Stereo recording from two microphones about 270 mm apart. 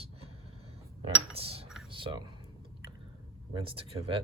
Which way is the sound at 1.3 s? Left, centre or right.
Right.